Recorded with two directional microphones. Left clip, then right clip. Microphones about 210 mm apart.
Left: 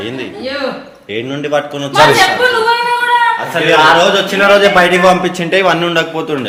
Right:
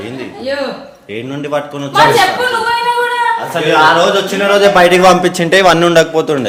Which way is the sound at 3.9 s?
20° left (ahead or behind).